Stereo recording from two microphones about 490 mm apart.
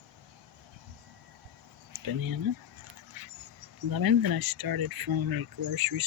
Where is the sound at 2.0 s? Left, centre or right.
Right.